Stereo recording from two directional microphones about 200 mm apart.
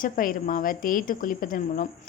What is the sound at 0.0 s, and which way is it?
Speech, 45° left (ahead or behind).